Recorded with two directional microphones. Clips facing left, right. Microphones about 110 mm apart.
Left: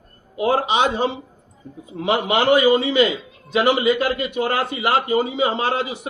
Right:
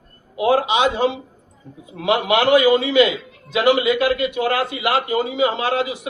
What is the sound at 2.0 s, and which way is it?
A man's voice, 35° left (ahead or behind).